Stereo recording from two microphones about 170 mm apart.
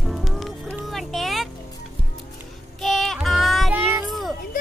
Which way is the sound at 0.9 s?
Centre (ahead or behind).